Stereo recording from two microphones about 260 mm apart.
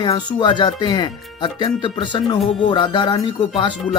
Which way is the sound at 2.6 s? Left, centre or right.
Centre.